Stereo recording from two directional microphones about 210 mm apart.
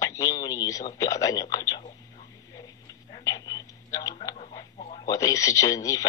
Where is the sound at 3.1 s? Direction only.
20° left (ahead or behind).